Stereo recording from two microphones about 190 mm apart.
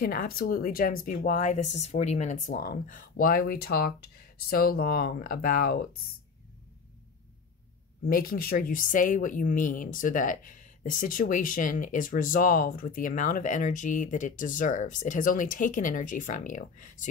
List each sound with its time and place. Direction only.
0.0 s speech: 50° left (ahead or behind)
8.0 s speech: 50° left (ahead or behind)